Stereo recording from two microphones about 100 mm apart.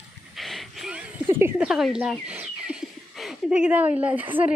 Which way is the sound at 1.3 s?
25° right (ahead or behind).